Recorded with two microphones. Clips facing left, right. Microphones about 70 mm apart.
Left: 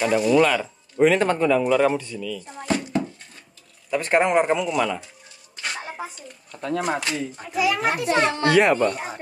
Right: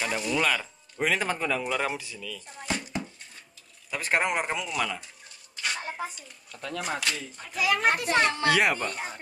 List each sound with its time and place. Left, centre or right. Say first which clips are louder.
0.0 s speech: left 9 dB; centre
2.4 s a sound: left 7 dB; left
3.9 s speech: left 8 dB; centre
5.8 s a sound: left 2 dB; centre
6.1 s speech: left 6 dB; left
7.5 s speech: left 3 dB; centre